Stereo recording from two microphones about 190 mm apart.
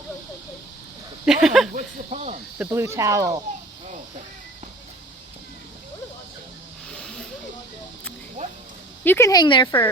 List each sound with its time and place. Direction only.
1.2 s speech: 5° right (ahead or behind)
1.7 s speech: 35° right (ahead or behind)
2.6 s speech: 10° right (ahead or behind)
6.9 s snake: centre (ahead or behind)
9.0 s speech: 15° left (ahead or behind)